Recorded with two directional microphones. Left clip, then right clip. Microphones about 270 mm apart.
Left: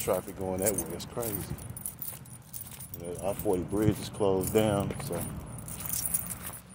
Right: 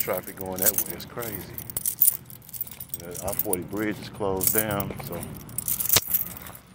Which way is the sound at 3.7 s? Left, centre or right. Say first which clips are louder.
Even; centre.